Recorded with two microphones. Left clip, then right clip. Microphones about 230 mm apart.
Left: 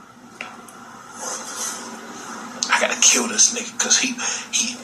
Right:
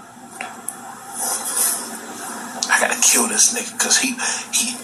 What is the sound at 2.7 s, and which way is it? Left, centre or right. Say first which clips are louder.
Speech: even; right.